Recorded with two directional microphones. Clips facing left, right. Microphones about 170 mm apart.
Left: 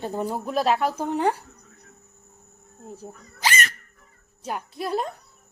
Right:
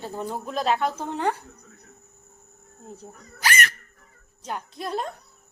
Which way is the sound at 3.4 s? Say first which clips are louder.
Even; 20° left (ahead or behind).